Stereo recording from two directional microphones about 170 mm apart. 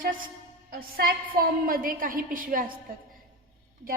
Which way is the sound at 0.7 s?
65° right (ahead or behind).